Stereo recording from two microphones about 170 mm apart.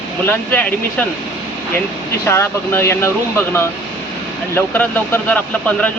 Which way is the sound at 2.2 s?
15° left (ahead or behind).